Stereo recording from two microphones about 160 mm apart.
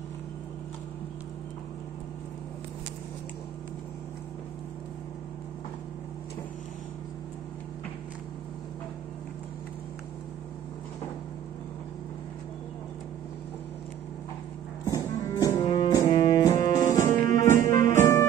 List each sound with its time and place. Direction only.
15.0 s music: 20° left (ahead or behind)